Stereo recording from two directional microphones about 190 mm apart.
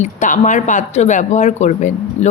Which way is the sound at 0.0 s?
40° left (ahead or behind).